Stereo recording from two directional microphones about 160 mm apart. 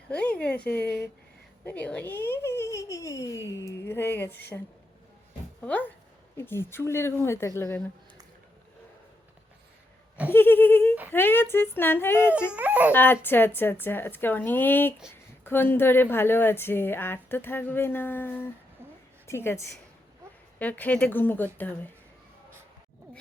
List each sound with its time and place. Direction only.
0.1 s a woman's voice: 5° left (ahead or behind)
5.6 s a woman's voice: 10° left (ahead or behind)
10.3 s a woman's voice: 15° left (ahead or behind)
12.5 s speech: 10° right (ahead or behind)
12.9 s a woman's voice: 15° left (ahead or behind)